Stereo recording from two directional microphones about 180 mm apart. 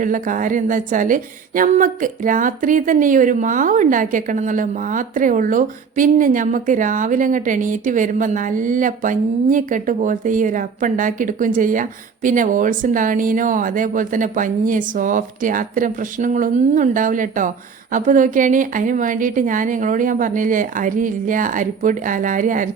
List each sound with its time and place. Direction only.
0.0 s a woman's voice: 45° right (ahead or behind)